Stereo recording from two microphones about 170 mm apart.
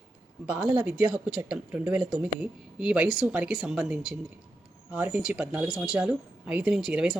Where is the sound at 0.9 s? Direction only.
5° right (ahead or behind).